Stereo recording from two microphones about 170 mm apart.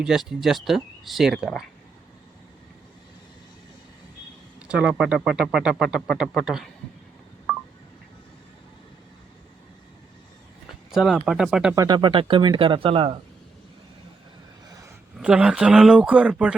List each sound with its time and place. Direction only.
0.0 s speech: 5° right (ahead or behind)
4.6 s speech: 5° right (ahead or behind)
10.9 s speech: 5° right (ahead or behind)
11.7 s speech: 20° right (ahead or behind)
15.2 s speech: 5° right (ahead or behind)